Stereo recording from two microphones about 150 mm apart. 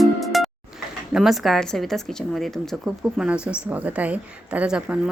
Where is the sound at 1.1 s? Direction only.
Centre (ahead or behind).